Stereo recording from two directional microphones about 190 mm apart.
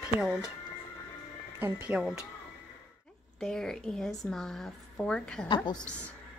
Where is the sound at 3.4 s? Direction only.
5° left (ahead or behind).